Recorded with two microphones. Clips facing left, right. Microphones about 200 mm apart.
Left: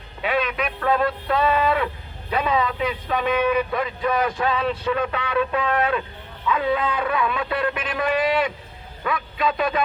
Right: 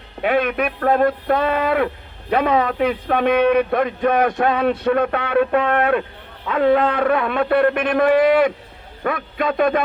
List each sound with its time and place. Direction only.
0.2 s a man's voice: 55° right (ahead or behind)